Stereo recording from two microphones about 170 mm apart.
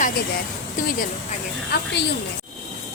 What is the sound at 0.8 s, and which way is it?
Speech, 50° left (ahead or behind).